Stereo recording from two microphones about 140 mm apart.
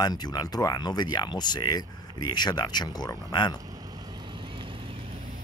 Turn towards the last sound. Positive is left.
turn(degrees=-35)  # may be behind; listen again after turning